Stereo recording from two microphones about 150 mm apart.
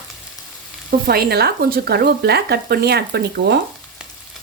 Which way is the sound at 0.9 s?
85° right.